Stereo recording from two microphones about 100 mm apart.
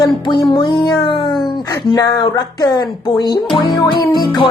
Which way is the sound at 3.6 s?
50° left (ahead or behind).